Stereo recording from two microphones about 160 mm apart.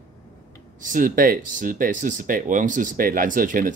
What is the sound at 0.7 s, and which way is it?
Speech, 55° right (ahead or behind).